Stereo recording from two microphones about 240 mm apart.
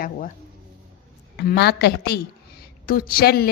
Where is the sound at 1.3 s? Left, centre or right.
Left.